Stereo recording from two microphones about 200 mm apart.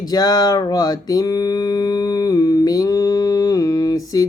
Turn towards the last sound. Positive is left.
turn(degrees=20)  # may be behind; listen again after turning